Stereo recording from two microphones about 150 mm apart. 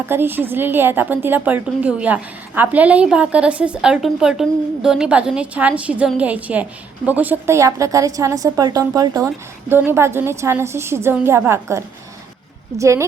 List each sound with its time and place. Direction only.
0.0 s a woman's voice: 15° right (ahead or behind)